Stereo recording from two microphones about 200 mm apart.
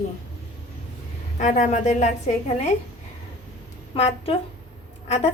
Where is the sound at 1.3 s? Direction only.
35° left (ahead or behind).